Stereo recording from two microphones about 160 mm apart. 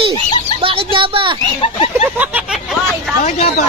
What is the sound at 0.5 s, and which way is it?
Speech, 35° right (ahead or behind).